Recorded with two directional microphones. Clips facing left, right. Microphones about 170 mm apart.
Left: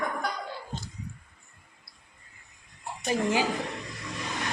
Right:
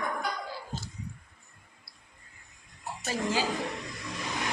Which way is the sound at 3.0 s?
15° left (ahead or behind).